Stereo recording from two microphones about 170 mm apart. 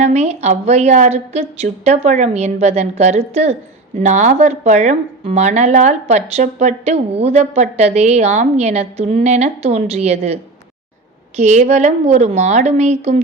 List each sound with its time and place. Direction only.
0.0 s a woman's voice: 40° right (ahead or behind)
11.3 s a woman's voice: 40° right (ahead or behind)